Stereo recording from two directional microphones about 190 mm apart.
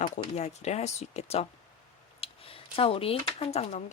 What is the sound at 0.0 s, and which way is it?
Speech, 35° left (ahead or behind).